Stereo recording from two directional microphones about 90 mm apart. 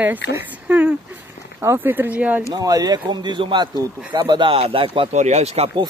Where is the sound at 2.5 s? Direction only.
40° right (ahead or behind); by 5.1 s 85° right.